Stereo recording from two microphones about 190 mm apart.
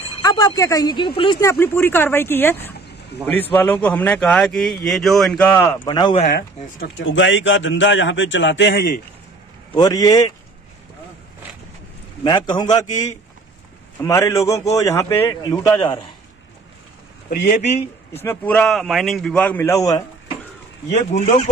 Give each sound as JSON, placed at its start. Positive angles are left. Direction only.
{"t": 0.2, "sound": "speech", "side_deg": 20}
{"t": 1.4, "sound": "a man's voice", "side_deg": 10}
{"t": 5.5, "sound": "speech", "side_deg": 15}
{"t": 6.8, "sound": "speech", "side_deg": 70}
{"t": 9.8, "sound": "speech", "side_deg": 20}
{"t": 12.2, "sound": "speech", "side_deg": 25}
{"t": 13.9, "sound": "a man's voice", "side_deg": 15}
{"t": 15.8, "sound": "speech", "side_deg": 25}
{"t": 17.3, "sound": "speech", "side_deg": 40}
{"t": 18.1, "sound": "a man's voice", "side_deg": 10}
{"t": 20.9, "sound": "speech", "side_deg": 40}